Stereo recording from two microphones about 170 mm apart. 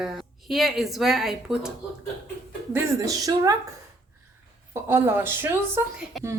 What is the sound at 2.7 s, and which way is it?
Speech, 20° right (ahead or behind).